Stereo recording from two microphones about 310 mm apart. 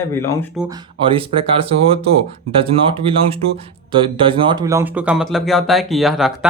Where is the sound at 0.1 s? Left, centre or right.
Centre.